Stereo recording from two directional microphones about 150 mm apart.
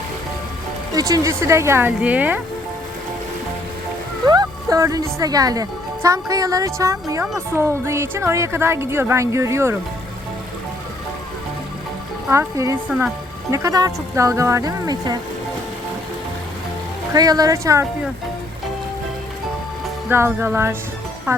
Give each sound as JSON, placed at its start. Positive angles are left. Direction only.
{"t": 0.9, "sound": "speech", "side_deg": -20}
{"t": 4.3, "sound": "speech", "side_deg": -25}
{"t": 12.3, "sound": "speech", "side_deg": -20}
{"t": 17.2, "sound": "speech", "side_deg": -25}
{"t": 20.1, "sound": "speech", "side_deg": -15}